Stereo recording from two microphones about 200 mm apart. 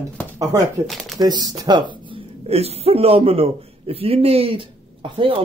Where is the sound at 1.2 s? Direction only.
20° right (ahead or behind).